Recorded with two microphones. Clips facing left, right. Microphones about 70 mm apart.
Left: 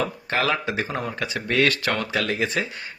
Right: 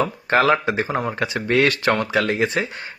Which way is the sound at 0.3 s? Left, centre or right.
Right.